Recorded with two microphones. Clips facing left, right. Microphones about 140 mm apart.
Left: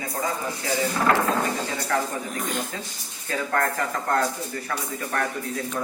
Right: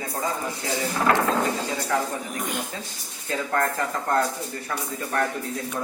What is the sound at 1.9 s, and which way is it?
Speech, 15° right (ahead or behind).